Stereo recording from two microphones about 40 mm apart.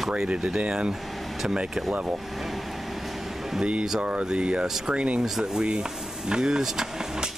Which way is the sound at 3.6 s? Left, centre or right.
Centre.